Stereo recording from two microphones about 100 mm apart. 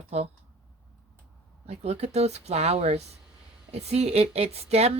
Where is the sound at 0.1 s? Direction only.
90° right.